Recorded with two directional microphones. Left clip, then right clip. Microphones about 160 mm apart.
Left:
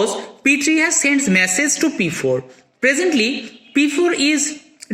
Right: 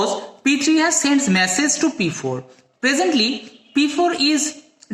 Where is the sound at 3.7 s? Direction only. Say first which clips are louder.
Left 1 dB; 55° right (ahead or behind).